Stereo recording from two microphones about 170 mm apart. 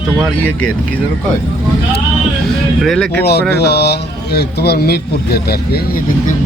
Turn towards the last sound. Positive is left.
turn(degrees=70)  # may be behind; listen again after turning